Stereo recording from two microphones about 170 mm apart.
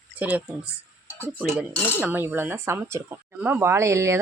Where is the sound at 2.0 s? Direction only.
10° right (ahead or behind).